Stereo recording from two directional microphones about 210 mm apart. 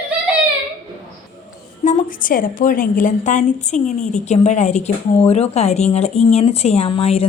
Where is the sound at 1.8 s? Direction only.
40° left (ahead or behind).